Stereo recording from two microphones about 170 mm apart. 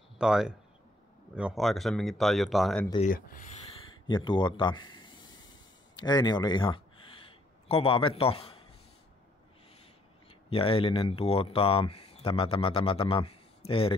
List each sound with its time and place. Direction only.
0.2 s speech: 5° right (ahead or behind)
3.0 s speech: 55° left (ahead or behind)
4.1 s a man's voice: 30° left (ahead or behind)
10.5 s speech: 35° left (ahead or behind)